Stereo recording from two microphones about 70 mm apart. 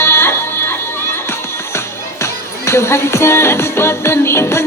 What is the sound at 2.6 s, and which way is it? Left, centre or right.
Music, left.